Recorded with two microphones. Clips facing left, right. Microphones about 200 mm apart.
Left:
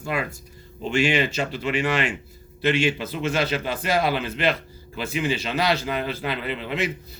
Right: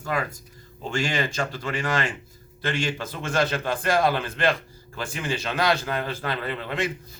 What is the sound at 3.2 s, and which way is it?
Speech, 50° right (ahead or behind).